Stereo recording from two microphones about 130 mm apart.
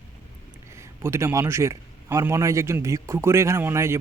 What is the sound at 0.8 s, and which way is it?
A man's voice, 20° right (ahead or behind).